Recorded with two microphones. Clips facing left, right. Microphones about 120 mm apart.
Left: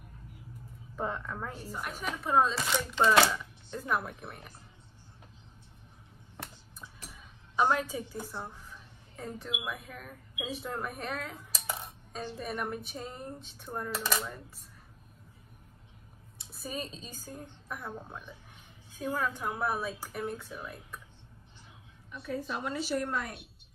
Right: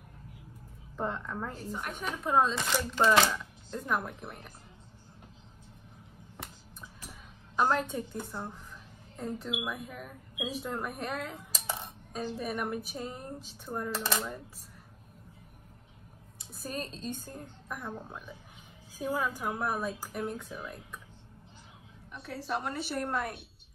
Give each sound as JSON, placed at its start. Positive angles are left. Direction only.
{"t": 0.9, "sound": "speech", "side_deg": 5}
{"t": 7.5, "sound": "a woman's voice", "side_deg": 0}
{"t": 16.3, "sound": "a woman's voice", "side_deg": 0}
{"t": 18.9, "sound": "speech", "side_deg": -5}
{"t": 22.1, "sound": "a woman's voice", "side_deg": -70}